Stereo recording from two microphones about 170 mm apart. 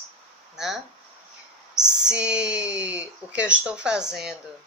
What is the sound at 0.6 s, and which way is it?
Speech, centre (ahead or behind).